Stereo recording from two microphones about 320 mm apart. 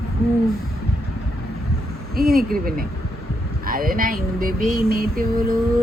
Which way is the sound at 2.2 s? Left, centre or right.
Right.